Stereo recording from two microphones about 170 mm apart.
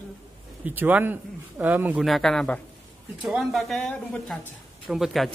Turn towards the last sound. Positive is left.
turn(degrees=0)  # may be behind; listen again after turning